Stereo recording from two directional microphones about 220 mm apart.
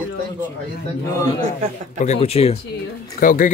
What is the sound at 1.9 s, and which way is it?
Speech, 30° left (ahead or behind).